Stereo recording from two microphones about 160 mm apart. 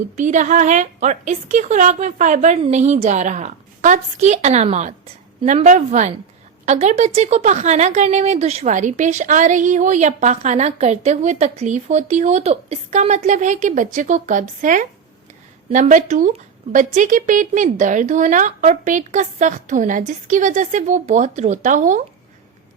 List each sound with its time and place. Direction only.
0.2 s speech: 50° right (ahead or behind)